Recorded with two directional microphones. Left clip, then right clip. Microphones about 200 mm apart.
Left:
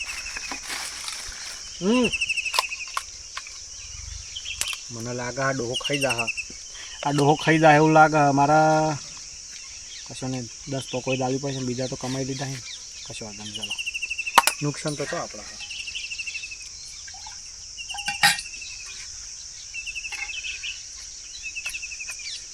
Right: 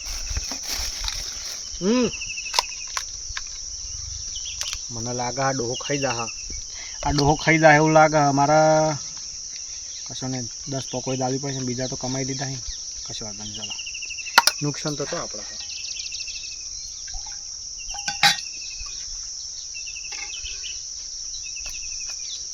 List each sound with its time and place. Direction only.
1.8 s speech: centre (ahead or behind)
5.0 s speech: 10° right (ahead or behind)
10.2 s speech: centre (ahead or behind)
14.3 s speech: 5° right (ahead or behind)
15.0 s speech: 20° right (ahead or behind)
18.0 s insect: 15° right (ahead or behind)